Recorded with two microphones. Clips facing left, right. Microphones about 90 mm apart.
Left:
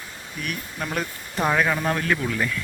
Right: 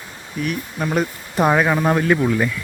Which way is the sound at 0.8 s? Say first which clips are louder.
Right 8 dB; 15° right (ahead or behind).